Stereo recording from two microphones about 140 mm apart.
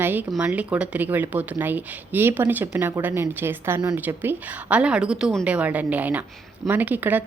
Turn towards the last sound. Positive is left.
turn(degrees=-10)  # may be behind; listen again after turning